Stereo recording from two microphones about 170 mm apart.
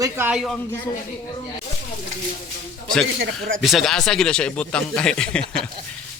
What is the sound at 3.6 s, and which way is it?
Speech, centre (ahead or behind).